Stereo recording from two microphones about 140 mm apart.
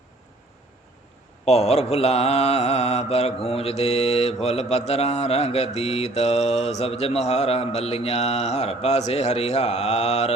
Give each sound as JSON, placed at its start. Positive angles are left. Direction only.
{"t": 1.5, "sound": "mantra", "side_deg": 50}